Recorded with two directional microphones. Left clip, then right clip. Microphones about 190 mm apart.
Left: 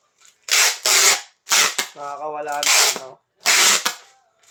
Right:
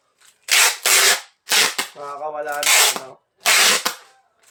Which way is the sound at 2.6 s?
5° right (ahead or behind).